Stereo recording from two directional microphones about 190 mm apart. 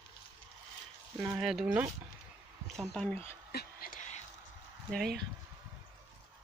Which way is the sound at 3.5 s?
55° left (ahead or behind).